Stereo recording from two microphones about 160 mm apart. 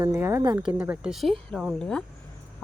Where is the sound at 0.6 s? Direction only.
5° right (ahead or behind).